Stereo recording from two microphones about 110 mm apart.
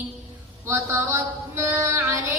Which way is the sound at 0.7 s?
20° right (ahead or behind).